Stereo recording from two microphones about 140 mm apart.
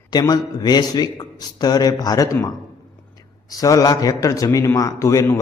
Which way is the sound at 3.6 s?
25° left (ahead or behind).